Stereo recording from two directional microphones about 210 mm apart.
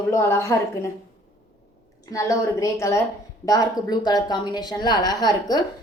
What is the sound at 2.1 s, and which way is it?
A woman's voice, 15° left (ahead or behind).